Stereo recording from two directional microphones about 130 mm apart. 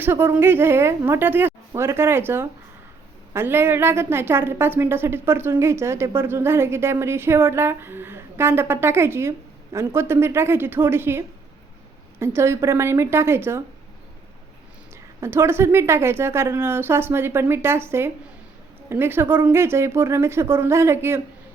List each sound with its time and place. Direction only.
0.0 s a woman's voice: 15° right (ahead or behind)
12.2 s a woman's voice: 20° right (ahead or behind)
15.2 s a woman's voice: 20° right (ahead or behind)